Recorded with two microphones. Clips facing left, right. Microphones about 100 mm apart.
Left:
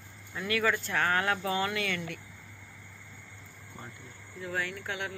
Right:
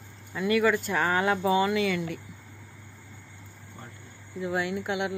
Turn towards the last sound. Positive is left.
turn(degrees=-15)  # may be behind; listen again after turning